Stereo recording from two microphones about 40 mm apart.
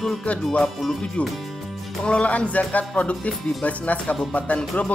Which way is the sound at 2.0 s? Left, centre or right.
Left.